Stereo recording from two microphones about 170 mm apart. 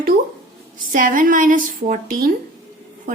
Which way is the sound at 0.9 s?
50° right (ahead or behind).